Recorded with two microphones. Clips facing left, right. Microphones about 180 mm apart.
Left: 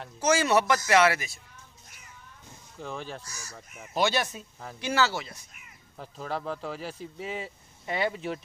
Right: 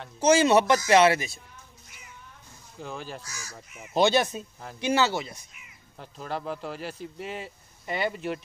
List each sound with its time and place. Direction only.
0.2 s speech: 20° right (ahead or behind)
2.8 s speech: centre (ahead or behind)
3.3 s speech: 90° right
3.5 s speech: 5° right (ahead or behind)
3.9 s speech: 25° right (ahead or behind)
5.9 s speech: centre (ahead or behind)